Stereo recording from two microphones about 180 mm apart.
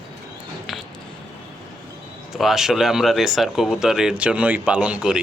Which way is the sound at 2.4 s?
Centre (ahead or behind).